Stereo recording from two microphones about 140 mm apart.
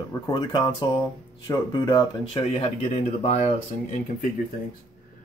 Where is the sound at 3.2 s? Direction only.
55° left (ahead or behind).